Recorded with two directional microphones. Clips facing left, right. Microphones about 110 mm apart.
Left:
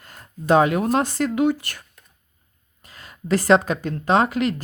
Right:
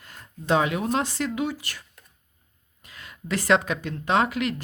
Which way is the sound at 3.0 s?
40° left (ahead or behind).